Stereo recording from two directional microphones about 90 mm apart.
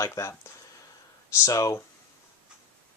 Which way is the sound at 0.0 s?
30° left (ahead or behind).